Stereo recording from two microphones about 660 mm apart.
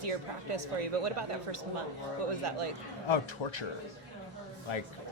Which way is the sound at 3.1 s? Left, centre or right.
Left.